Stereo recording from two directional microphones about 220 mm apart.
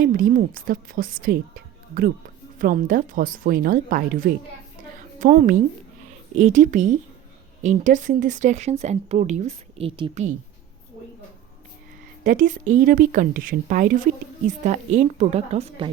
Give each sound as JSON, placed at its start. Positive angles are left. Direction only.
{"t": 0.0, "sound": "speech", "side_deg": -40}
{"t": 12.2, "sound": "speech", "side_deg": -35}